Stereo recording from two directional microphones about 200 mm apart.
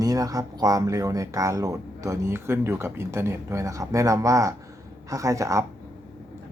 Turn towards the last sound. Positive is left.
turn(degrees=-15)  # may be behind; listen again after turning